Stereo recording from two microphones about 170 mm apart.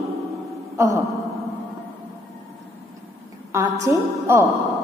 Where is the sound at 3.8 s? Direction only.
15° right (ahead or behind).